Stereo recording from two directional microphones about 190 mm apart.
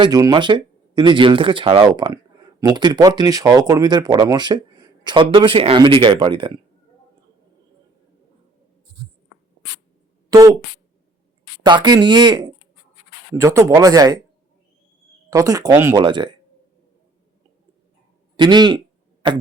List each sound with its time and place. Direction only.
0.0 s speech: 20° right (ahead or behind)
10.2 s speech: 20° right (ahead or behind)
11.6 s speech: 25° right (ahead or behind)
15.3 s speech: 20° right (ahead or behind)
18.3 s speech: 20° right (ahead or behind)